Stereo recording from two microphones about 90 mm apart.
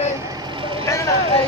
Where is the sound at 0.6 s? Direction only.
70° right (ahead or behind).